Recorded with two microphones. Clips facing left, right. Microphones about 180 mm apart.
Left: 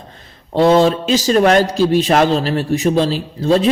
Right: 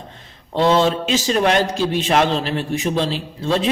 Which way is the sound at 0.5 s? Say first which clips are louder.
Left 4 dB; 40° left (ahead or behind).